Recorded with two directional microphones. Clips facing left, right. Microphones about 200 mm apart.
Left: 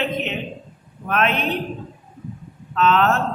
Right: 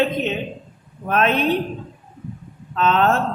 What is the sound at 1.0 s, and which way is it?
Speech, 35° right (ahead or behind).